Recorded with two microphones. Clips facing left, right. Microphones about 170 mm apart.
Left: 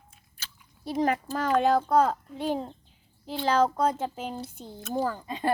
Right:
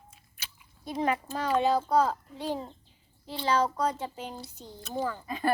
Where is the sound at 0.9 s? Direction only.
45° left (ahead or behind).